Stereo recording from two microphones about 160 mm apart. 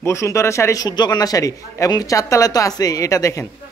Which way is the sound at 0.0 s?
20° left (ahead or behind).